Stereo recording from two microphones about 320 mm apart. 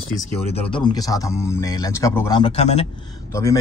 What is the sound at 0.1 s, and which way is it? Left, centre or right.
Speech, centre.